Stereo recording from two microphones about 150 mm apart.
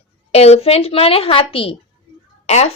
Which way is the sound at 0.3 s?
45° left (ahead or behind).